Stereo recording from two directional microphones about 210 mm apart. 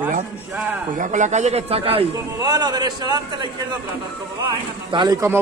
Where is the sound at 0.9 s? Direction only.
35° right (ahead or behind); by 3.4 s 20° right (ahead or behind).